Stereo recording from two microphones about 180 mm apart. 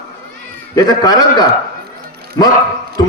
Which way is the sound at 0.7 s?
20° left (ahead or behind).